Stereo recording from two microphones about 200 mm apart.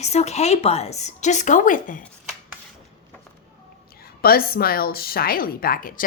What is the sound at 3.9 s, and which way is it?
A woman's voice, 50° left (ahead or behind).